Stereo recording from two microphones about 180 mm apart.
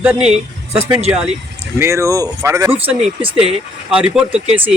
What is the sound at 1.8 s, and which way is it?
Speech, 15° right (ahead or behind).